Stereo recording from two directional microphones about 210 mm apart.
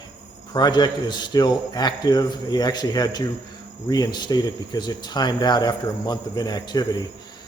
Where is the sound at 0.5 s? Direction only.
20° left (ahead or behind).